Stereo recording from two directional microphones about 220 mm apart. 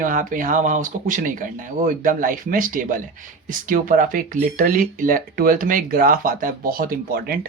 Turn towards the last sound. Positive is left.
turn(degrees=-40)  # may be behind; listen again after turning